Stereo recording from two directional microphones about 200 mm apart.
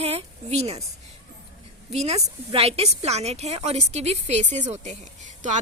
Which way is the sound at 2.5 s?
30° right (ahead or behind).